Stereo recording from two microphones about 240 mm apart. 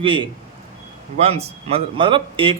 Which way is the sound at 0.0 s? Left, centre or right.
Right.